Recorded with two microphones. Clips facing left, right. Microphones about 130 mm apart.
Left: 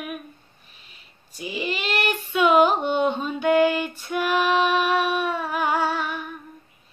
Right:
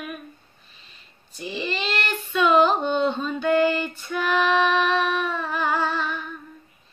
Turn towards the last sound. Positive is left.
turn(degrees=10)  # may be behind; listen again after turning